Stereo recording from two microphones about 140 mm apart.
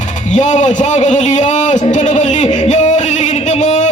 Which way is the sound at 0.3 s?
60° left (ahead or behind).